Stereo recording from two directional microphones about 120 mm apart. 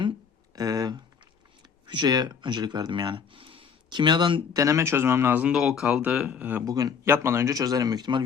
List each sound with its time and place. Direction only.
0.5 s speech: 35° right (ahead or behind)
4.5 s speech: 25° right (ahead or behind)
6.7 s speech: 30° right (ahead or behind)